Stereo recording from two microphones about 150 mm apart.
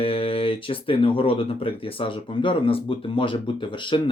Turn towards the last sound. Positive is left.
turn(degrees=35)  # may be behind; listen again after turning